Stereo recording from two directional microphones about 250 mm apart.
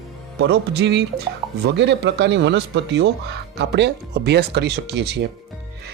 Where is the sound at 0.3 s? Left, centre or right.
Right.